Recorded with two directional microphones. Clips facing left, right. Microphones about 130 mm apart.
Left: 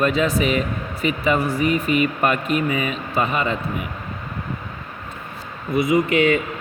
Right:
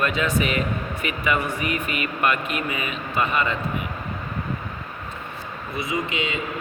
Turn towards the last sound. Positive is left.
turn(degrees=-20)  # may be behind; listen again after turning